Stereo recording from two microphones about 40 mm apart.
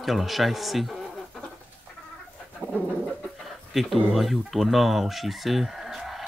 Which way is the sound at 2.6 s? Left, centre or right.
Right.